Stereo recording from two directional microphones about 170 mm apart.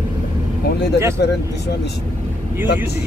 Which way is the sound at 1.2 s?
80° left.